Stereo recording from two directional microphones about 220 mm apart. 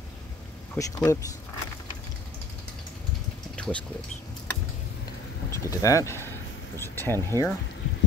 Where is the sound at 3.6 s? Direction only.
5° left (ahead or behind).